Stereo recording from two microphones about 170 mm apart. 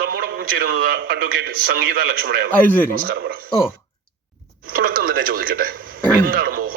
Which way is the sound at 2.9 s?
55° right (ahead or behind).